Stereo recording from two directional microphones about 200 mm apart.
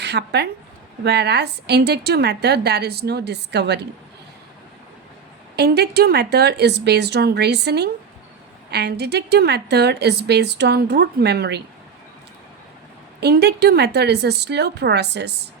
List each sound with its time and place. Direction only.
0.0 s a woman's voice: 55° right (ahead or behind)
5.5 s a woman's voice: 55° right (ahead or behind)
13.1 s a woman's voice: 55° right (ahead or behind)